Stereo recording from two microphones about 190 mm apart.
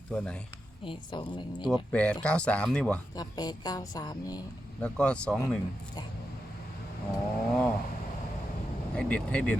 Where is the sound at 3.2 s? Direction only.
20° left (ahead or behind).